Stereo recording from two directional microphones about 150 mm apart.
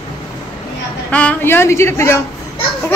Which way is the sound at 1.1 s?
10° left (ahead or behind).